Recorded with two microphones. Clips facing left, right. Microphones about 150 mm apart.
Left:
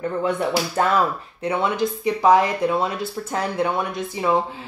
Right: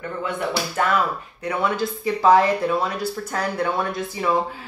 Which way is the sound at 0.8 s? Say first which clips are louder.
Left 1 dB; 30° left (ahead or behind).